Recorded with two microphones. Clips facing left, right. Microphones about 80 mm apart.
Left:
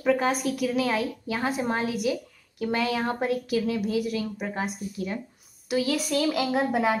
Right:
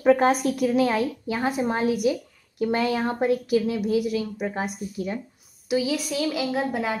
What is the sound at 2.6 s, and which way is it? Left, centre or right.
A woman's voice, right.